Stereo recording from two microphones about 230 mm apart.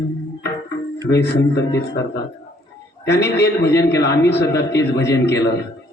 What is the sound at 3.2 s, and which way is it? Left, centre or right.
A man's voice, left.